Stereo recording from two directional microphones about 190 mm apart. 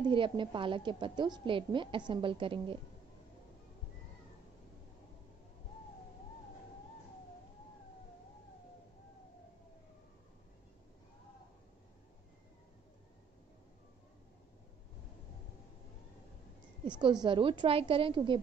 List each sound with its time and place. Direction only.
0.1 s a woman's voice: 25° right (ahead or behind)
16.8 s a woman's voice: 25° right (ahead or behind)